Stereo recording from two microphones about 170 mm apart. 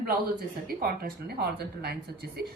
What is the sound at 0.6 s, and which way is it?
Speech, 65° right (ahead or behind).